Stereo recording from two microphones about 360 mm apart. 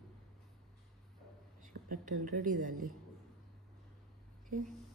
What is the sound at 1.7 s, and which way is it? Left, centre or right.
A woman's voice, right.